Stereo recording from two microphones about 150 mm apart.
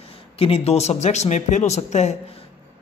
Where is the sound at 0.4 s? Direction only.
45° left (ahead or behind).